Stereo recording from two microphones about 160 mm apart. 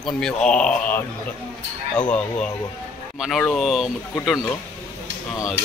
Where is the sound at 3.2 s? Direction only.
Centre (ahead or behind).